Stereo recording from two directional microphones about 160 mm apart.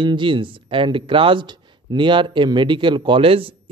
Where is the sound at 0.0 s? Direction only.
30° right (ahead or behind).